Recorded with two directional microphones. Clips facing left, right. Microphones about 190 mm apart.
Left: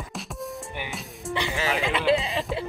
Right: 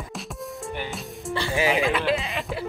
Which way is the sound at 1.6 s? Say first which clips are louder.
Right 7 dB; 15° right (ahead or behind).